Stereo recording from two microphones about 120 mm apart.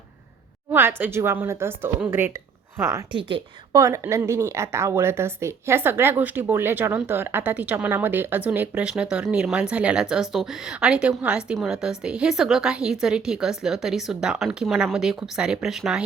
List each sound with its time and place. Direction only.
0.7 s a woman's voice: 20° right (ahead or behind)
3.1 s a woman's voice: 45° right (ahead or behind)
3.7 s a woman's voice: 30° right (ahead or behind); by 16.0 s 5° right (ahead or behind)